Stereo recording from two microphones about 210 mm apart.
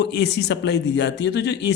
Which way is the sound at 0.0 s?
50° left (ahead or behind).